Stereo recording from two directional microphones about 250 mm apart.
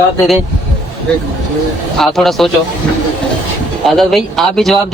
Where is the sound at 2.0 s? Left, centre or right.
Centre.